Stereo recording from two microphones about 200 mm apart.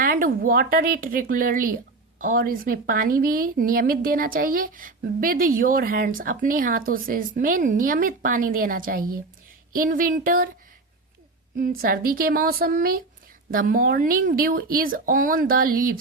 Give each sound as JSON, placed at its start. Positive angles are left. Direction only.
{"t": 0.0, "sound": "speech", "side_deg": -45}
{"t": 11.5, "sound": "speech", "side_deg": -45}